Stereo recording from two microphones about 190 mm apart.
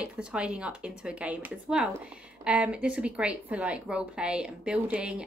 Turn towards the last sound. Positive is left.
turn(degrees=-5)  # may be behind; listen again after turning